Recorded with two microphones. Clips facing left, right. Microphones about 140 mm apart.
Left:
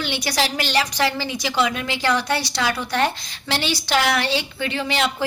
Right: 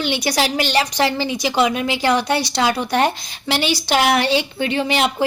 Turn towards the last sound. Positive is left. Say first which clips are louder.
# right 4 dB
turn(degrees=-15)  # may be behind; listen again after turning